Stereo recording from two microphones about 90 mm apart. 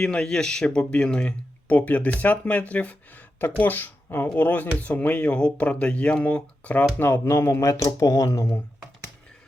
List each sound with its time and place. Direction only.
0.0 s speech: 10° left (ahead or behind)
7.3 s speech: 30° left (ahead or behind)